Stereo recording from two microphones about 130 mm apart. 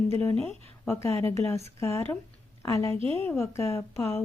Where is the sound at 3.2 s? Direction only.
20° left (ahead or behind).